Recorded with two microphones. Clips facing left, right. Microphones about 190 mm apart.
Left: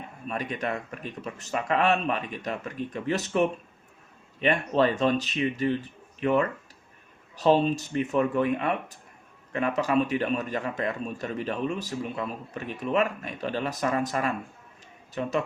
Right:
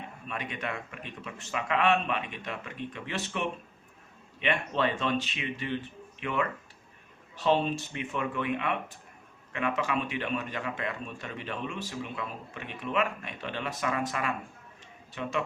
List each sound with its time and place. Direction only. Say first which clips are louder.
0.3 s speech: left 6 dB; 40° left (ahead or behind)